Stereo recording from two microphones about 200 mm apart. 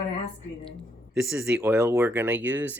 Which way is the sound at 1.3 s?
5° right (ahead or behind).